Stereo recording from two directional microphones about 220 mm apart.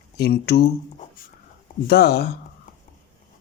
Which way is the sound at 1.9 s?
45° left (ahead or behind).